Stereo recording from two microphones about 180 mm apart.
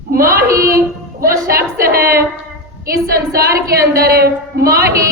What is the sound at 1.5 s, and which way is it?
Speech, 55° right (ahead or behind).